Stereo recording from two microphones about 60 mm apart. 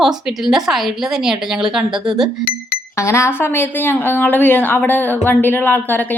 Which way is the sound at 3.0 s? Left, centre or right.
Left.